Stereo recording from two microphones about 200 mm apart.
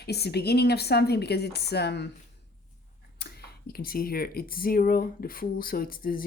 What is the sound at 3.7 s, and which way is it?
A woman's voice, 50° left (ahead or behind).